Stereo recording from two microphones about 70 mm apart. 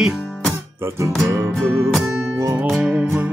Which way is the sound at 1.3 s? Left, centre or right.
Right.